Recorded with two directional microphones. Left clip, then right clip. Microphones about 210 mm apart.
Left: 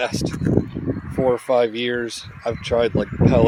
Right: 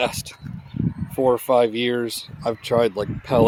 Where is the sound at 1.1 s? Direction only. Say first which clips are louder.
Right 1 dB; 15° right (ahead or behind).